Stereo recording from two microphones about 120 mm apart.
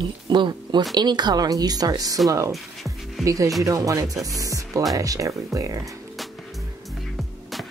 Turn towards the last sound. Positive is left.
turn(degrees=-25)  # may be behind; listen again after turning